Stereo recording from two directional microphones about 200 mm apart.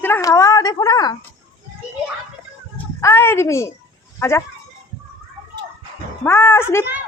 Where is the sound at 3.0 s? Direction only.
15° left (ahead or behind).